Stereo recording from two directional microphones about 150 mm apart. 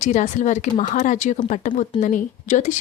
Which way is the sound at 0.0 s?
55° left (ahead or behind).